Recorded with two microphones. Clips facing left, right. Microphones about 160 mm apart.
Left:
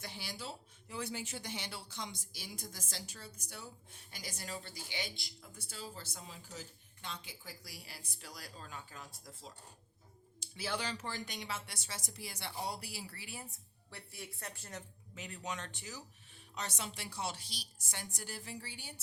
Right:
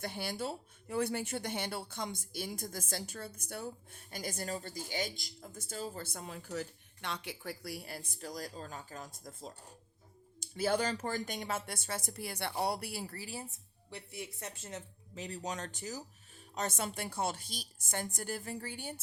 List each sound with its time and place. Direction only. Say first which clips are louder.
0.0 s speech: right 8 dB; 55° right (ahead or behind); by 13.5 s 35° right (ahead or behind)
13.9 s speech: right 5 dB; 20° right (ahead or behind)
15.1 s speech: right 4 dB; 35° right (ahead or behind); by 19.0 s 50° right (ahead or behind)